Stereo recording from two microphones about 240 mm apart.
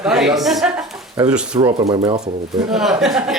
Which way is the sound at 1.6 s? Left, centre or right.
Right.